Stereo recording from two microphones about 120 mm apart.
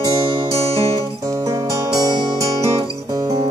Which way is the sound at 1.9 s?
30° right (ahead or behind).